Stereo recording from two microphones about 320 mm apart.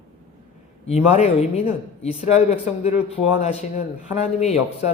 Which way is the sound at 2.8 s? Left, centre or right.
Centre.